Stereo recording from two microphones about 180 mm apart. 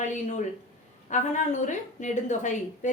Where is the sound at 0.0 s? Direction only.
40° left (ahead or behind).